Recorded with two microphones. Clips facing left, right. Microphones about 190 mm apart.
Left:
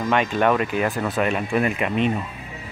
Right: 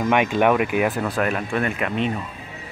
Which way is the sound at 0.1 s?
15° right (ahead or behind).